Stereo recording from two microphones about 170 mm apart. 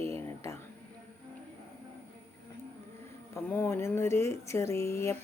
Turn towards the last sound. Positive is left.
turn(degrees=15)  # may be behind; listen again after turning